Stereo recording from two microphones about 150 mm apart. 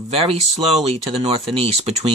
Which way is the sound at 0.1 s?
40° right (ahead or behind).